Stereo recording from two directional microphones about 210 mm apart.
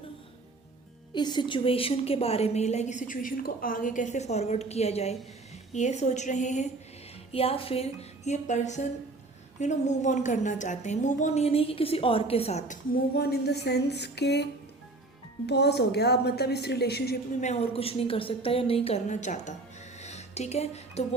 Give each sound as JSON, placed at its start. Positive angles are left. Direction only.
{"t": 1.1, "sound": "a woman's voice", "side_deg": 20}
{"t": 13.1, "sound": "a woman's voice", "side_deg": 50}
{"t": 15.4, "sound": "a woman's voice", "side_deg": 50}
{"t": 17.4, "sound": "a woman's voice", "side_deg": 30}
{"t": 20.0, "sound": "music", "side_deg": 30}